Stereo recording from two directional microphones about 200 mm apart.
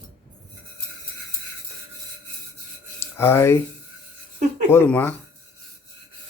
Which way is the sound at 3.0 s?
10° left (ahead or behind).